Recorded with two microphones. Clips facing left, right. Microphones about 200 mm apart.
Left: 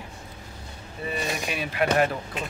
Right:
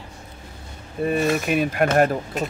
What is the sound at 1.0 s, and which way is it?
Speech, 50° right (ahead or behind).